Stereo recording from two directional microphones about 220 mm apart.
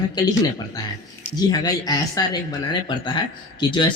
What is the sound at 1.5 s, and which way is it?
Speech, 15° left (ahead or behind).